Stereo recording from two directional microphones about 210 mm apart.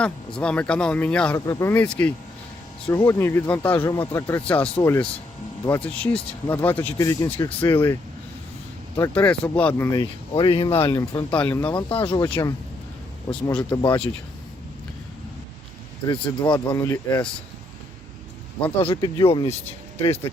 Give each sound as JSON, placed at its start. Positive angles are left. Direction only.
{"t": 0.0, "sound": "speech", "side_deg": 5}
{"t": 9.0, "sound": "speech", "side_deg": 5}
{"t": 11.3, "sound": "speech", "side_deg": 5}
{"t": 11.7, "sound": "speech", "side_deg": 25}
{"t": 13.7, "sound": "speech", "side_deg": 20}
{"t": 16.0, "sound": "speech", "side_deg": 20}
{"t": 18.8, "sound": "speech", "side_deg": 25}
{"t": 20.3, "sound": "speech", "side_deg": 15}